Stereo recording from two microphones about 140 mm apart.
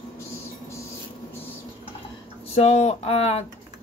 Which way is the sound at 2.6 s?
50° left (ahead or behind).